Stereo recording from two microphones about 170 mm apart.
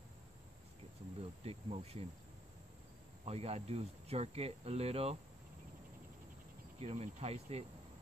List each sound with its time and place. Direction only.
1.4 s speech: 35° right (ahead or behind)
3.3 s speech: 35° right (ahead or behind)
6.8 s speech: 35° right (ahead or behind)